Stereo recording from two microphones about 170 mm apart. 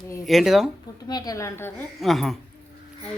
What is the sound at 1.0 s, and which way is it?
Speech, 25° left (ahead or behind).